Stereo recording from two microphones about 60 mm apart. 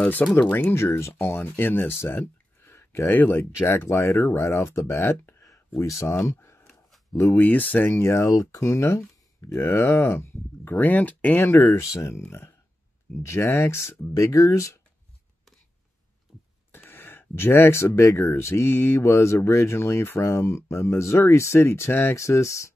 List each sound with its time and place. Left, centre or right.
0.0 s speech: left
0.7 s speech: left
2.1 s a sound: left
3.1 s speech: left
3.6 s speech: left
4.4 s speech: left
6.4 s a sound: left
7.3 s speech: left
8.0 s speech: left
8.3 s speech: left
14.1 s speech: left
16.7 s speech: left